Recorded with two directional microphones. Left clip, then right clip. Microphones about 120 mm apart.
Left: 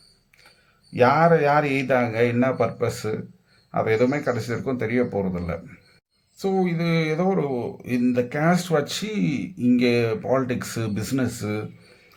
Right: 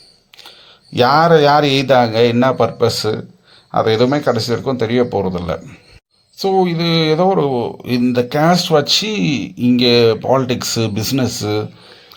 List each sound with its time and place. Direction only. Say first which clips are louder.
0.9 s a man's voice: right 7 dB; 40° right (ahead or behind)